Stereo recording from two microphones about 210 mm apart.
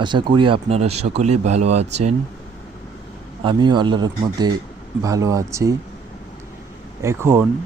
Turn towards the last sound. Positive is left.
turn(degrees=-10)  # may be behind; listen again after turning